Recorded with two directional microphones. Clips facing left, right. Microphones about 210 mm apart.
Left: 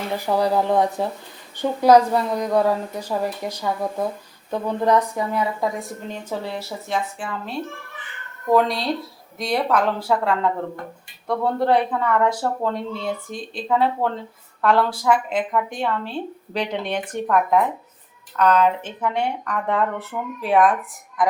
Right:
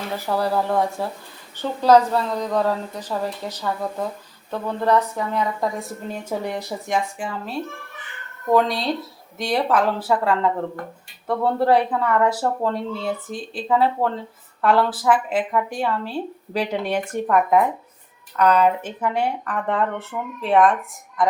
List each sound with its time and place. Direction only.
0.3 s a woman's voice: 15° left (ahead or behind); by 7.3 s 15° right (ahead or behind)
8.4 s speech: centre (ahead or behind)